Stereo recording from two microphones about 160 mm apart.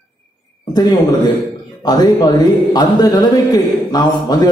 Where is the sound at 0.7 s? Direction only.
25° left (ahead or behind).